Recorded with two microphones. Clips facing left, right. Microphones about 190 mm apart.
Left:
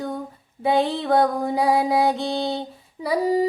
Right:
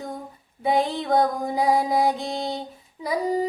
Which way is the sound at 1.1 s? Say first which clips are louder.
Left 3 dB; 65° left (ahead or behind).